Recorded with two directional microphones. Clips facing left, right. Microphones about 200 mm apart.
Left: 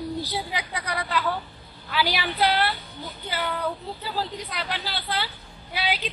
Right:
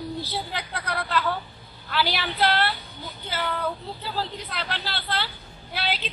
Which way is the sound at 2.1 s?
10° left (ahead or behind).